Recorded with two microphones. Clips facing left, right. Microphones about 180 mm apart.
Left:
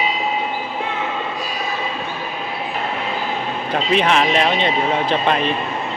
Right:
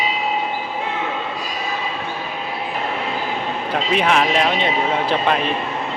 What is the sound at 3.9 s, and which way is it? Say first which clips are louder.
Speech: left 1 dB; 5° right (ahead or behind).